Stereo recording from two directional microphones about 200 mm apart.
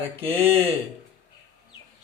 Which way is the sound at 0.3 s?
30° right (ahead or behind).